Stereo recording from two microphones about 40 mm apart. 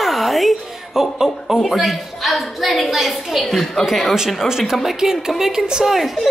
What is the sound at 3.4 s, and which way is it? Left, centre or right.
Speech, centre.